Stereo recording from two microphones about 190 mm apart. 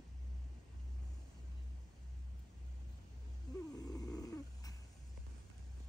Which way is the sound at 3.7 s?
20° left (ahead or behind).